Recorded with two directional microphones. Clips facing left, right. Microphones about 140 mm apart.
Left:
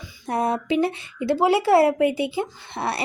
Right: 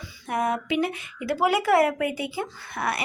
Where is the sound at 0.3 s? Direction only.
30° left (ahead or behind).